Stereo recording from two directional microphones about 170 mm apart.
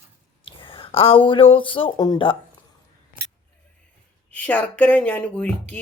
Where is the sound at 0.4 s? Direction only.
30° left (ahead or behind).